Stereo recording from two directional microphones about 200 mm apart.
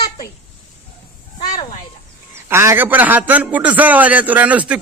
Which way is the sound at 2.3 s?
10° right (ahead or behind).